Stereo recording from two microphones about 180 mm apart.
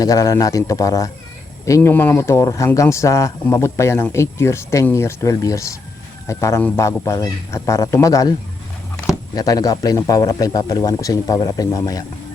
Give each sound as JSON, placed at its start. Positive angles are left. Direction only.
{"t": 0.0, "sound": "speech", "side_deg": 20}
{"t": 9.3, "sound": "speech", "side_deg": 20}